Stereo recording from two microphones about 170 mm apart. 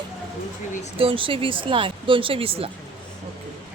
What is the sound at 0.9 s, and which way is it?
Speech, 30° right (ahead or behind).